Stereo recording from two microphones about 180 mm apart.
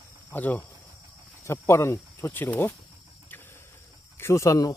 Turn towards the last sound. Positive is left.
turn(degrees=15)  # may be behind; listen again after turning